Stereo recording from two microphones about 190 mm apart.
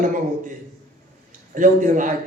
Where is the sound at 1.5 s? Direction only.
40° right (ahead or behind).